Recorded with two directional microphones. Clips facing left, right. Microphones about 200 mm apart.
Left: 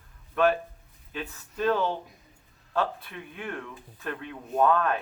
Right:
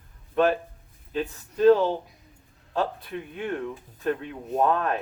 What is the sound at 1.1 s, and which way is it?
Speech, 30° right (ahead or behind).